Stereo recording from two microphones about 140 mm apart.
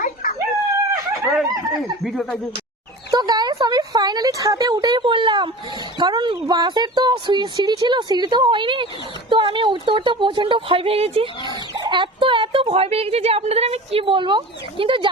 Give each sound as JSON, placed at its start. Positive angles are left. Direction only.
{"t": 1.4, "sound": "speech", "side_deg": 0}
{"t": 3.1, "sound": "a sound", "side_deg": -30}
{"t": 3.6, "sound": "a woman's voice", "side_deg": -30}
{"t": 11.7, "sound": "speech", "side_deg": -30}